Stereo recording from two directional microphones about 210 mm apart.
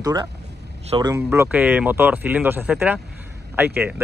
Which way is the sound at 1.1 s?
10° right (ahead or behind).